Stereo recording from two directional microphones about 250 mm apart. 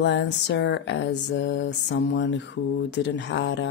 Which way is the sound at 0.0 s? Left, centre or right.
Left.